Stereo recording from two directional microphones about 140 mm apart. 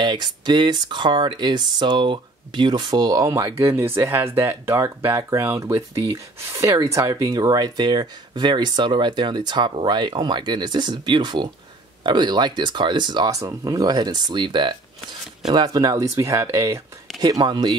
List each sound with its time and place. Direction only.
0.0 s speech: 30° right (ahead or behind)
17.2 s speech: 30° right (ahead or behind)